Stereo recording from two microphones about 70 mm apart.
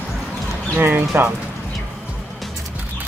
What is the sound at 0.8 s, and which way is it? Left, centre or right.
Speech, right.